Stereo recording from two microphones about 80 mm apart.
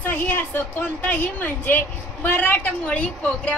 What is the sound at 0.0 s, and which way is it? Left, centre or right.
Speech, left.